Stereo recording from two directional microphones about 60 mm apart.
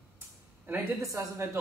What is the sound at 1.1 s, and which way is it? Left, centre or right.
Speech, right.